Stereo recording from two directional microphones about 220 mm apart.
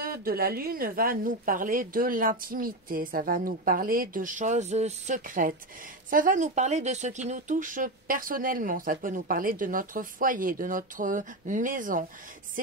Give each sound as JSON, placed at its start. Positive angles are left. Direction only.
{"t": 0.0, "sound": "speech", "side_deg": -40}